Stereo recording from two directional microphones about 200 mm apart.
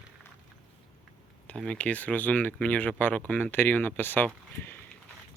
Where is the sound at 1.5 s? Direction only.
5° left (ahead or behind).